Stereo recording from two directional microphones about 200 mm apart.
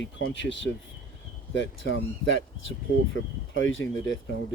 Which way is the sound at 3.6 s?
75° left (ahead or behind).